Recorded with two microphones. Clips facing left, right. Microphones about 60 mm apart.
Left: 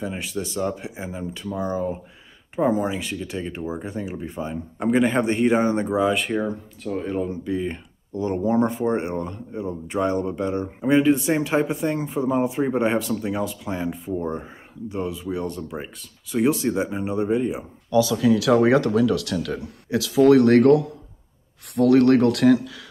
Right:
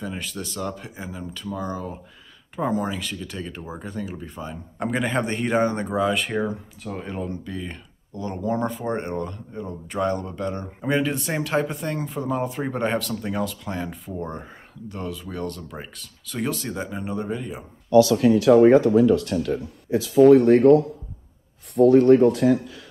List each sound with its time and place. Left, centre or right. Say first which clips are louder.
0.0 s speech: left 3 dB; centre
2.5 s speech: left 4 dB; centre
10.8 s speech: left 6 dB; centre
18.4 s speech: right 6 dB; left